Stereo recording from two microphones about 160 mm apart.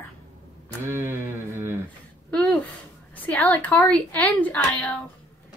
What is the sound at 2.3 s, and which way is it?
A woman's voice, 5° left (ahead or behind).